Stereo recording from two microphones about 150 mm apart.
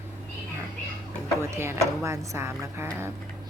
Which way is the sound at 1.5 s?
20° right (ahead or behind).